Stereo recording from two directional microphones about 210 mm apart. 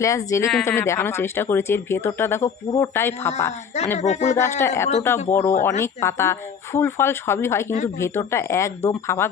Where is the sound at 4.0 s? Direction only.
35° left (ahead or behind).